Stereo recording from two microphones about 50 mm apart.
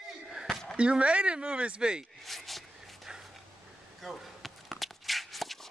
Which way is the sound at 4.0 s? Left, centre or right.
Centre.